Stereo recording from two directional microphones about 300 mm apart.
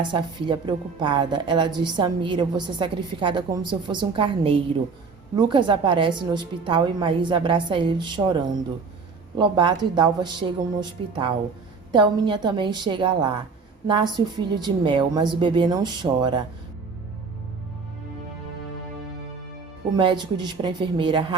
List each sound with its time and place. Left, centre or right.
0.0 s speech: centre
20.0 s speech: centre